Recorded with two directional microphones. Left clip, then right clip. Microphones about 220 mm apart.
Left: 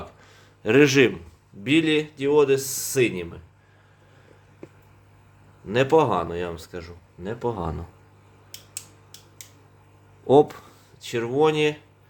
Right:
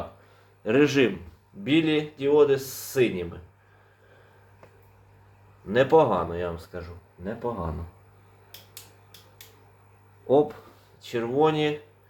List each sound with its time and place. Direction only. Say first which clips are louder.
0.6 s speech: left 4 dB; 40° left (ahead or behind)
5.6 s speech: even; 40° left (ahead or behind)
10.2 s speech: left 4 dB; 50° left (ahead or behind)
11.0 s speech: left 2 dB; 40° left (ahead or behind)